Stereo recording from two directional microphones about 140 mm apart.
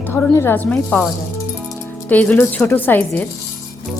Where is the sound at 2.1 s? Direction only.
10° left (ahead or behind).